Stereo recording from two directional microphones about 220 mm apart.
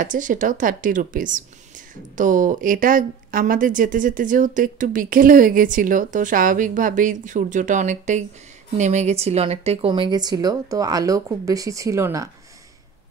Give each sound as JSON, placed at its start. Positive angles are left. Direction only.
{"t": 0.0, "sound": "speech", "side_deg": -35}